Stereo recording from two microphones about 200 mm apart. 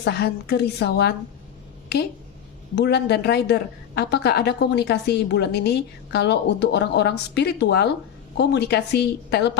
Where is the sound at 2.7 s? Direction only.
55° left (ahead or behind).